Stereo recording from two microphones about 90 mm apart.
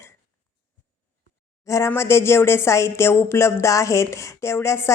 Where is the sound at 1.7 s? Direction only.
30° left (ahead or behind).